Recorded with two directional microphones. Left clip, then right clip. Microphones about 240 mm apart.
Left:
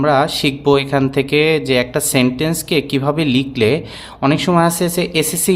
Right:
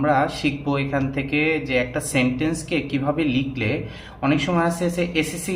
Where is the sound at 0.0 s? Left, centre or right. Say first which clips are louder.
Left 6 dB; left.